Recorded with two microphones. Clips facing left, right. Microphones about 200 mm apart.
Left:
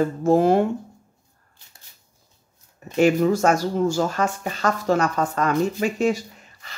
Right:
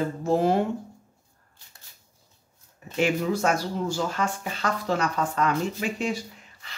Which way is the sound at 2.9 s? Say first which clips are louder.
Left 7 dB; 45° left (ahead or behind).